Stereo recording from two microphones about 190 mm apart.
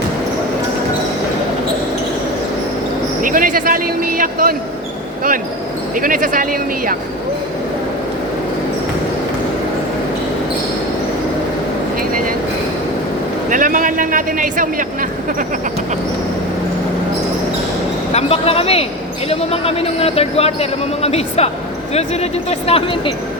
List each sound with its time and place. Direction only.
3.2 s speech: 45° right (ahead or behind)
5.9 s speech: 45° right (ahead or behind)
13.5 s a sound: 45° right (ahead or behind)
18.1 s speech: 35° left (ahead or behind)